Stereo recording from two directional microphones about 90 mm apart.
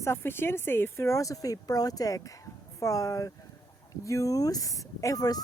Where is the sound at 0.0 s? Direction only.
25° left (ahead or behind).